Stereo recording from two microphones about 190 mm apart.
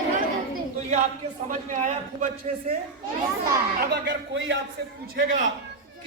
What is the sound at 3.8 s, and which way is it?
Speech, 65° right (ahead or behind).